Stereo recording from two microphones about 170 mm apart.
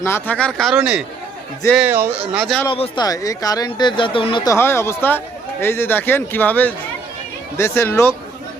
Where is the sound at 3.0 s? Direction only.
20° left (ahead or behind).